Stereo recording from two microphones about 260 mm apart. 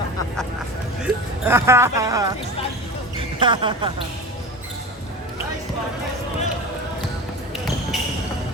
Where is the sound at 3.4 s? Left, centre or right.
Centre.